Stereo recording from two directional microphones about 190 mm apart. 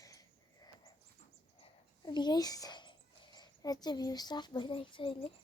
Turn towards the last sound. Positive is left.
turn(degrees=30)  # may be behind; listen again after turning